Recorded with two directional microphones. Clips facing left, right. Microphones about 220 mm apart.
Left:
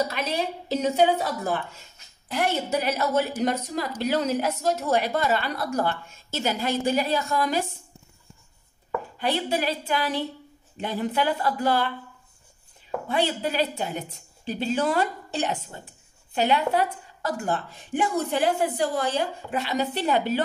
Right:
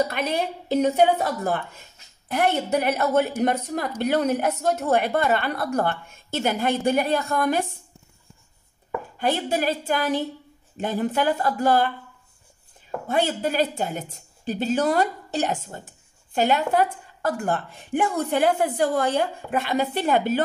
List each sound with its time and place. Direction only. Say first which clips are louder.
0.1 s a woman's voice: right 2 dB; 55° right (ahead or behind)
9.2 s a woman's voice: right 2 dB; 45° right (ahead or behind)
13.1 s a woman's voice: right 2 dB; 45° right (ahead or behind)